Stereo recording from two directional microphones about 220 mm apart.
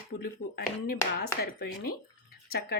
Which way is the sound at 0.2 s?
45° left (ahead or behind).